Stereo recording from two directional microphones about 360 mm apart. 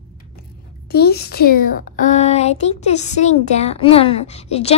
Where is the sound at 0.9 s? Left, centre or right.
Left.